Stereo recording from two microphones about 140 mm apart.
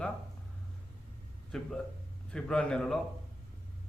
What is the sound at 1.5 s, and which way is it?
Speech, centre (ahead or behind).